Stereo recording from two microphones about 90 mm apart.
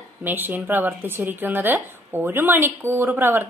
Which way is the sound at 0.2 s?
20° right (ahead or behind).